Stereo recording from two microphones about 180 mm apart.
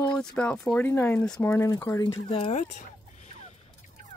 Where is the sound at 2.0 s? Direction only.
25° left (ahead or behind).